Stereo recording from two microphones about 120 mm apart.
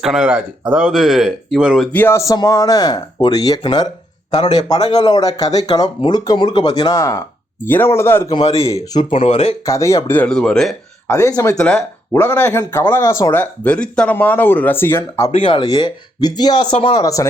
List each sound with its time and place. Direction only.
0.0 s speech: 5° right (ahead or behind)
1.9 s speech: 15° left (ahead or behind)
8.3 s speech: 45° left (ahead or behind)
8.5 s speech: 25° left (ahead or behind)
9.1 s speech: 65° left (ahead or behind)
9.6 s speech: 25° left (ahead or behind)
10.2 s speech: 5° left (ahead or behind)
11.1 s speech: 25° left (ahead or behind)
13.3 s speech: 15° left (ahead or behind)
15.3 s speech: 50° left (ahead or behind)
15.6 s speech: 35° left (ahead or behind)